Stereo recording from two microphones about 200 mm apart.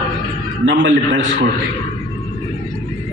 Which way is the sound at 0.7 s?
70° right (ahead or behind).